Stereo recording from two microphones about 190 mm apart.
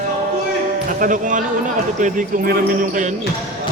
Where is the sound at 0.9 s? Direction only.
45° right (ahead or behind).